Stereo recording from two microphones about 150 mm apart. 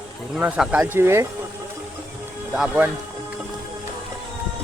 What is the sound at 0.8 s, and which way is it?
Speech, 15° right (ahead or behind).